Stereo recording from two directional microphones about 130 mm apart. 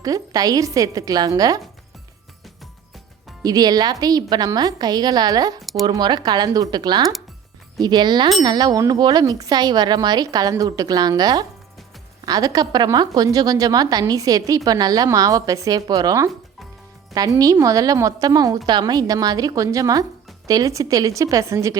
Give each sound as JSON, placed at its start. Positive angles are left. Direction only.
{"t": 0.0, "sound": "speech", "side_deg": -30}
{"t": 3.4, "sound": "a woman's voice", "side_deg": -30}